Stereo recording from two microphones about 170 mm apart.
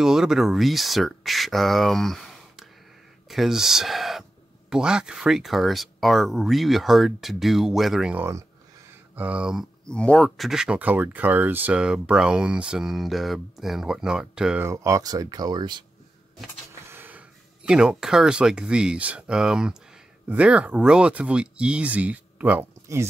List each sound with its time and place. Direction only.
0.0 s speech: 5° right (ahead or behind)
14.7 s speech: 20° right (ahead or behind)
16.8 s speech: 10° right (ahead or behind)